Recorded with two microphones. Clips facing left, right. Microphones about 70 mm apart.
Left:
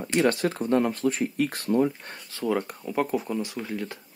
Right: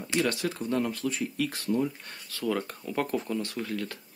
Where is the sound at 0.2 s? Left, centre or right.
Left.